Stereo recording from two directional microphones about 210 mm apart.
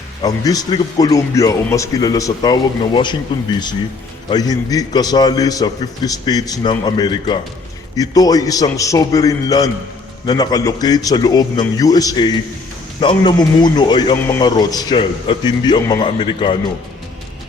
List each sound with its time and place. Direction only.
0.2 s speech: 20° left (ahead or behind)
4.3 s a man's voice: 20° left (ahead or behind)